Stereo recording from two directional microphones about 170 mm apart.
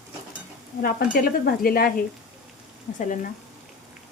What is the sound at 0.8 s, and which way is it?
Speech, 65° left (ahead or behind).